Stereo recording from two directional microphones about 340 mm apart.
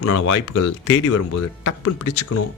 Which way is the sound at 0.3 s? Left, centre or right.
Left.